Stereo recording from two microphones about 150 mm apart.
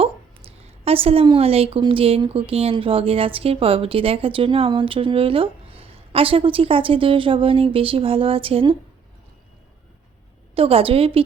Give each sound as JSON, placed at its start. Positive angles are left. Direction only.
{"t": 0.0, "sound": "a woman's voice", "side_deg": -40}
{"t": 10.5, "sound": "a woman's voice", "side_deg": -40}